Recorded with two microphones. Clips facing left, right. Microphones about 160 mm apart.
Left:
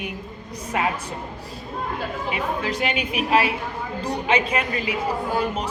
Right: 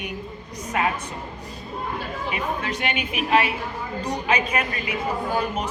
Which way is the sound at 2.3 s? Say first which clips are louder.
Left 1 dB; 30° left (ahead or behind).